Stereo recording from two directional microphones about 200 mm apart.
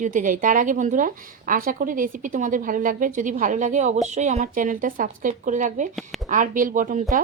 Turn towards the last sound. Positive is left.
turn(degrees=-40)  # may be behind; listen again after turning